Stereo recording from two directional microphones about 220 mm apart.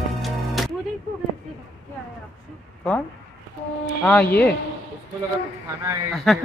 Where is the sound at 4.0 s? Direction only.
5° left (ahead or behind).